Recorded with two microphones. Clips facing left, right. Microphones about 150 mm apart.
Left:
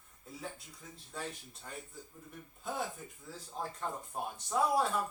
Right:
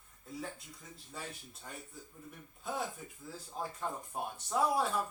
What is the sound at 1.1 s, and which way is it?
Speech, 5° right (ahead or behind).